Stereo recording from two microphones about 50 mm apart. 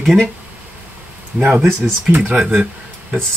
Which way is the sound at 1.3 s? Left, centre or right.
Right.